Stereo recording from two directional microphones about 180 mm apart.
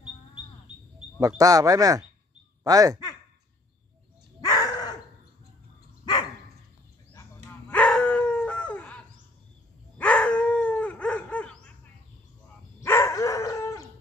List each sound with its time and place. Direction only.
1.2 s speech: 20° right (ahead or behind)
4.4 s a sound: 20° left (ahead or behind)
7.7 s dog: 5° left (ahead or behind)
12.8 s dog: 15° left (ahead or behind)